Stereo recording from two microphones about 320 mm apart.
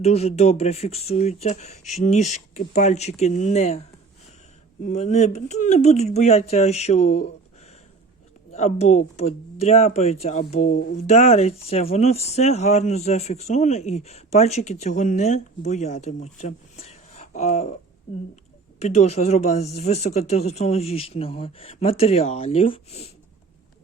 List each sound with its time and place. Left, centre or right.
0.0 s speech: centre
4.9 s speech: left
8.5 s speech: left
18.8 s speech: centre